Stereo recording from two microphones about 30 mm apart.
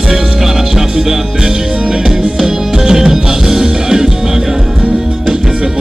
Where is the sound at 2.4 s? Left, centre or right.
Right.